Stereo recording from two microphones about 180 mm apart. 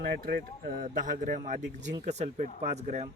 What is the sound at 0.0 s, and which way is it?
Speech, 60° right (ahead or behind).